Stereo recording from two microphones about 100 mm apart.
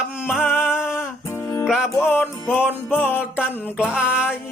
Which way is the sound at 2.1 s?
20° left (ahead or behind).